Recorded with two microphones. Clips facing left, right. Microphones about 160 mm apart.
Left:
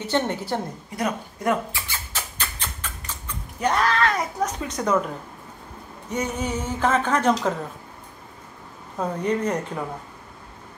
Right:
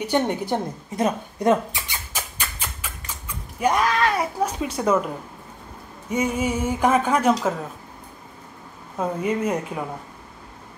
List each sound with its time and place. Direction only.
0.0 s speech: 15° right (ahead or behind)
6.0 s a woman's voice: 10° right (ahead or behind)
8.9 s a woman's voice: 5° right (ahead or behind)